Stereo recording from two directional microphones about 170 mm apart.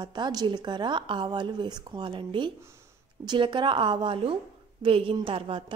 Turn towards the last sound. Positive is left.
turn(degrees=-30)  # may be behind; listen again after turning